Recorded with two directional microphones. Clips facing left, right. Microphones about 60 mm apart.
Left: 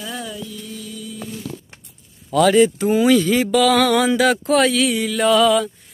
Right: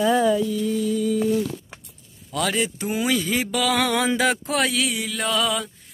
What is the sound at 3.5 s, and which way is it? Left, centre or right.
Mantra, centre.